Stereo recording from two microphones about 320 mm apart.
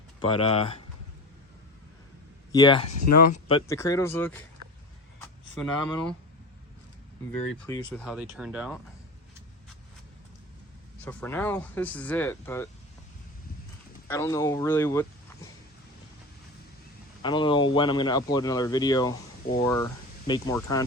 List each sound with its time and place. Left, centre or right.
0.2 s speech: centre
2.5 s speech: centre
7.3 s speech: centre
11.0 s speech: centre
14.1 s speech: centre
17.2 s speech: centre